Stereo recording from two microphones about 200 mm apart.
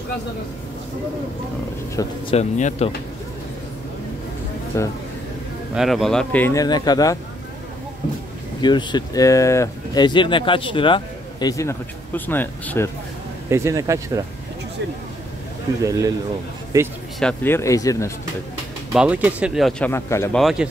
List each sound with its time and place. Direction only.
2.0 s speech: 15° left (ahead or behind)
2.3 s speech: 35° left (ahead or behind)
4.7 s speech: 15° left (ahead or behind)
5.8 s speech: centre (ahead or behind); by 7.2 s 20° left (ahead or behind)
8.5 s speech: 20° left (ahead or behind)
13.5 s speech: 15° right (ahead or behind)
15.8 s speech: 15° right (ahead or behind)
17.2 s speech: 5° left (ahead or behind)
18.9 s speech: 5° right (ahead or behind)
19.9 s speech: 15° left (ahead or behind)
20.3 s speech: centre (ahead or behind)